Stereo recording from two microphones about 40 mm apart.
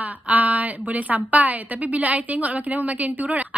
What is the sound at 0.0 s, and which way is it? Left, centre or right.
A woman's voice, right.